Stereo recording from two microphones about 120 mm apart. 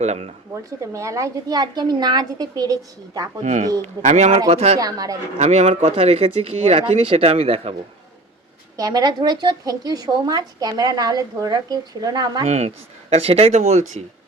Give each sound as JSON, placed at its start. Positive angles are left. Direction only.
{"t": 0.0, "sound": "speech", "side_deg": -65}
{"t": 0.5, "sound": "a woman's voice", "side_deg": -25}
{"t": 3.4, "sound": "speech", "side_deg": -90}
{"t": 4.0, "sound": "speech", "side_deg": -75}
{"t": 4.4, "sound": "speech", "side_deg": -60}
{"t": 4.8, "sound": "a woman's voice", "side_deg": -30}
{"t": 5.4, "sound": "speech", "side_deg": -70}
{"t": 5.8, "sound": "speech", "side_deg": -55}
{"t": 8.7, "sound": "a woman's voice", "side_deg": -35}
{"t": 12.5, "sound": "speech", "side_deg": -70}